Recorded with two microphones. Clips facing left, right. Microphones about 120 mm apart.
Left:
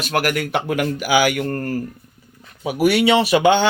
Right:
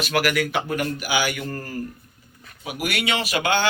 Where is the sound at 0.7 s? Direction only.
85° left; by 1.8 s 65° left (ahead or behind).